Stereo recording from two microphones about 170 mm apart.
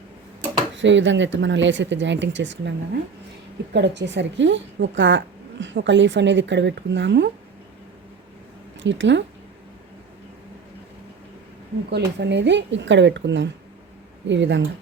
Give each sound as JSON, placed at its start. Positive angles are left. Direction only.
{"t": 0.8, "sound": "speech", "side_deg": -90}
{"t": 8.8, "sound": "speech", "side_deg": -90}
{"t": 11.9, "sound": "speech", "side_deg": -85}